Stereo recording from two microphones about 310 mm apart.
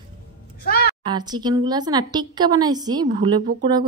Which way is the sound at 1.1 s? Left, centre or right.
Centre.